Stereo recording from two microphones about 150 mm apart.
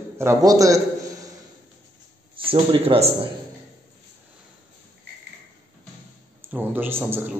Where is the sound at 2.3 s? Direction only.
35° right (ahead or behind).